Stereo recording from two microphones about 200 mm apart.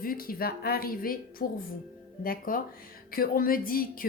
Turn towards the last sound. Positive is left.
turn(degrees=45)  # may be behind; listen again after turning